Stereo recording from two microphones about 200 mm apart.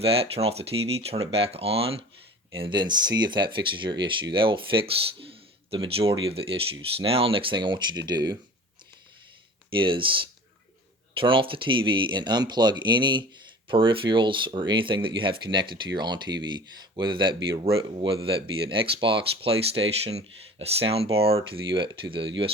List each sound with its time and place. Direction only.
0.0 s speech: 30° right (ahead or behind)
9.6 s speech: 25° right (ahead or behind)